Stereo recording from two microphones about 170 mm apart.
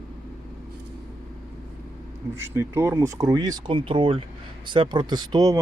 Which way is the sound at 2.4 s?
15° right (ahead or behind).